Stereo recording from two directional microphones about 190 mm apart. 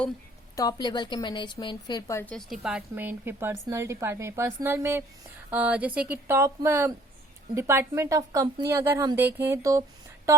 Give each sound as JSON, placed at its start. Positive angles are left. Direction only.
{"t": 0.5, "sound": "a woman's voice", "side_deg": 20}